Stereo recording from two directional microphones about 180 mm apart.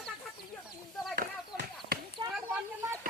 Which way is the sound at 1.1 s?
55° right (ahead or behind).